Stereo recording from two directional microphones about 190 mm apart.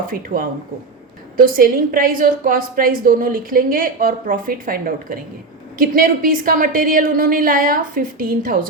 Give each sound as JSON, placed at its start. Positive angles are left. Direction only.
{"t": 0.3, "sound": "a woman's voice", "side_deg": -45}